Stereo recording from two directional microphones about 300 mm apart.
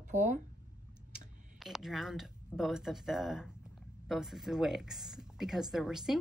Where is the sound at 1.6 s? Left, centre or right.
Centre.